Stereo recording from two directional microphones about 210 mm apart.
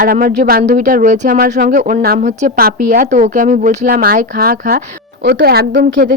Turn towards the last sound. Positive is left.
turn(degrees=-50)  # may be behind; listen again after turning